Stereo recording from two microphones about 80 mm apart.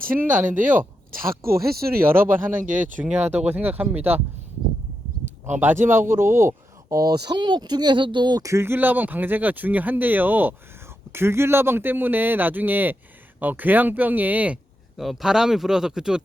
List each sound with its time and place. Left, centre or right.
0.2 s speech: right
1.2 s speech: right
5.5 s speech: right
7.0 s speech: right
8.4 s speech: right
8.6 s speech: right
14.9 s speech: centre